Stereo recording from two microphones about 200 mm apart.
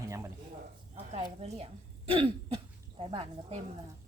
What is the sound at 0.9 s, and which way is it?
Speech, 35° right (ahead or behind).